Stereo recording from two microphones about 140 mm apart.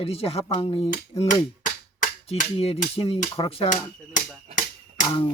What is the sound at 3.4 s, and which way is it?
Speech, 35° left (ahead or behind).